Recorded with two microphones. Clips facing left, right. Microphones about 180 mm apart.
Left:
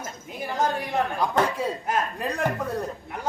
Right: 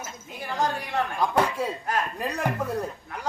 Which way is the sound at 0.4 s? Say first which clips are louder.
Left 2 dB; 20° left (ahead or behind).